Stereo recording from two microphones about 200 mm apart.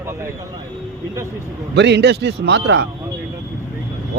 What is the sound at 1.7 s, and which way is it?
A man's voice, 60° right (ahead or behind).